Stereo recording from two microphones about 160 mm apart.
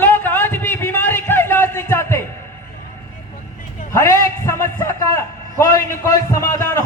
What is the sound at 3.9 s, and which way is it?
A man's voice, 20° left (ahead or behind).